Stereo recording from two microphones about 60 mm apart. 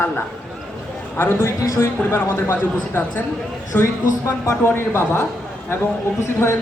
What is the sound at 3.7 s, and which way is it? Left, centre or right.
Speech, left.